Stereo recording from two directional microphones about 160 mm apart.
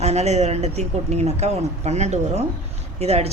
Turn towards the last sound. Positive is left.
turn(degrees=-40)  # may be behind; listen again after turning